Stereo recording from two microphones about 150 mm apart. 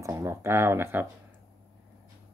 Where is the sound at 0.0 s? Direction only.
20° right (ahead or behind).